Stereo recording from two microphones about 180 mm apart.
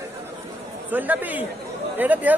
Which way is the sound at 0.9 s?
10° right (ahead or behind).